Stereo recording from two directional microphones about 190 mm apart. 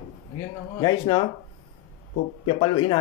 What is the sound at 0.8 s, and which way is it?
Speech, 25° left (ahead or behind).